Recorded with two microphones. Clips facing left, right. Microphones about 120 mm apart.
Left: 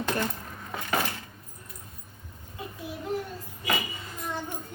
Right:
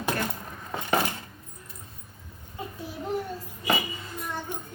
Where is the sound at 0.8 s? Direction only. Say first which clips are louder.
Right 3 dB; 25° right (ahead or behind).